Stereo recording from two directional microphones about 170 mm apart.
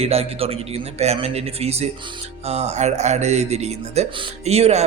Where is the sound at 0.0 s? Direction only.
35° right (ahead or behind).